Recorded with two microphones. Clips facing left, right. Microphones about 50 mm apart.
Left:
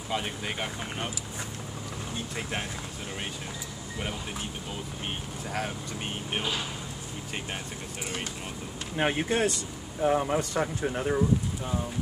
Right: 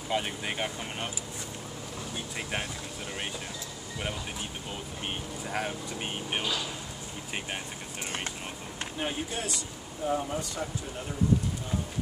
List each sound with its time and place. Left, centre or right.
0.1 s speech: centre
8.9 s speech: left